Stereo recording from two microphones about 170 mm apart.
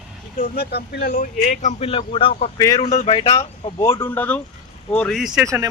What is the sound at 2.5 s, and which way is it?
Speech, 20° left (ahead or behind).